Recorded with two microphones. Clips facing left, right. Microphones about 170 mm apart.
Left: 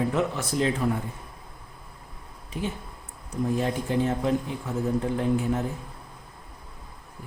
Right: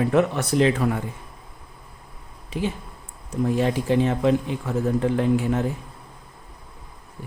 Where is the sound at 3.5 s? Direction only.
90° right.